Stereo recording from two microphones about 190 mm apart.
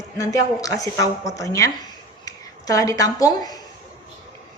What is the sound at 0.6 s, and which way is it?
A woman's voice, 20° left (ahead or behind).